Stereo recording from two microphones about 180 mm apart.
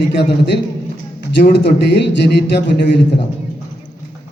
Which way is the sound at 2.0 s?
75° left (ahead or behind).